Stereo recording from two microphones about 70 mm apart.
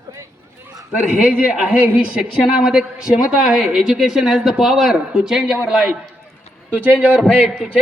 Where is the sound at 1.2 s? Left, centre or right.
Right.